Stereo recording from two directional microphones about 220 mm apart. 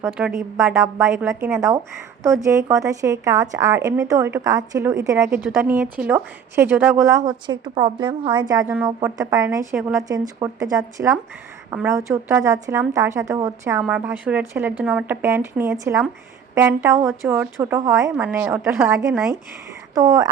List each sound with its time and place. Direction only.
0.0 s speech: 5° right (ahead or behind)
19.9 s speech: 15° right (ahead or behind)